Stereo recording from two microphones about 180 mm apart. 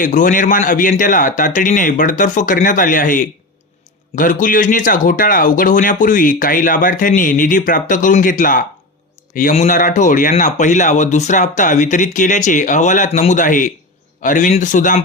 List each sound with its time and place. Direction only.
0.0 s a man's voice: 45° left (ahead or behind)